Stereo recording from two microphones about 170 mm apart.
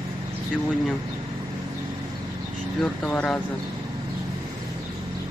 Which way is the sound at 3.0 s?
5° left (ahead or behind).